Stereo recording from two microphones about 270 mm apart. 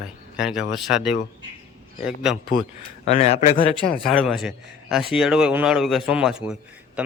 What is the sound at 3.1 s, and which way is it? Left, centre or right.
Speech, left.